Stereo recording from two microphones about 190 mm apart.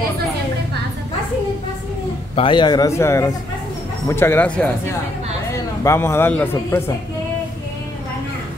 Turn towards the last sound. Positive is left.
turn(degrees=10)  # may be behind; listen again after turning